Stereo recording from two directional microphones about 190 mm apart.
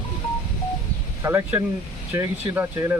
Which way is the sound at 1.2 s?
10° right (ahead or behind).